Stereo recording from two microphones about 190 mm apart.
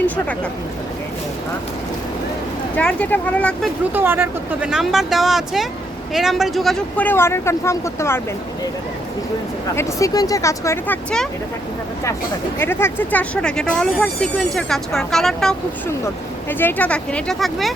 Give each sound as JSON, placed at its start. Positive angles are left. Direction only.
{"t": 2.7, "sound": "speech", "side_deg": 5}
{"t": 3.9, "sound": "speech", "side_deg": -10}
{"t": 9.7, "sound": "speech", "side_deg": 20}
{"t": 12.5, "sound": "speech", "side_deg": 10}